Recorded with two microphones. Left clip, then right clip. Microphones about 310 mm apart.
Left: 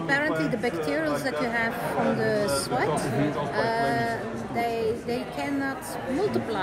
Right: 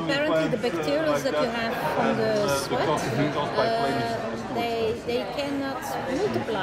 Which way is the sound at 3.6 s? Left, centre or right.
Left.